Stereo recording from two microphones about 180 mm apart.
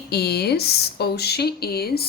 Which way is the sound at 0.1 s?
60° left (ahead or behind).